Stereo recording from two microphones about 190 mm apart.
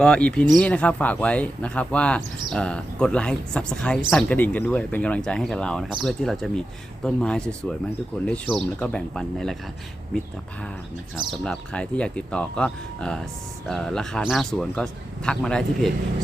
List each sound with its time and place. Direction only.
0.0 s speech: 5° left (ahead or behind)
11.4 s speech: 5° left (ahead or behind)